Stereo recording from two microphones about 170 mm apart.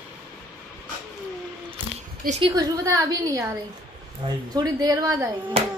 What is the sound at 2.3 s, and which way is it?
A woman's voice, 30° right (ahead or behind).